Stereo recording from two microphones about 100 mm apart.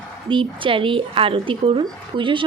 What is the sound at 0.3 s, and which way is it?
A woman's voice, 55° right (ahead or behind).